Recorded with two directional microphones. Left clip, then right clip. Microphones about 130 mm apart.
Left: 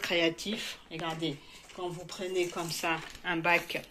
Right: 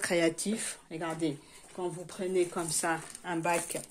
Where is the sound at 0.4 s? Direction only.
90° right.